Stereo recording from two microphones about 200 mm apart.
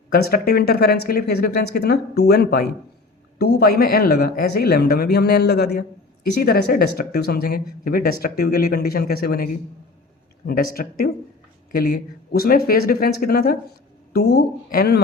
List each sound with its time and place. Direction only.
0.1 s speech: 50° left (ahead or behind)